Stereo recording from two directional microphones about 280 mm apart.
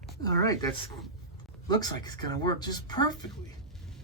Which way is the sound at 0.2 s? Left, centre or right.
Centre.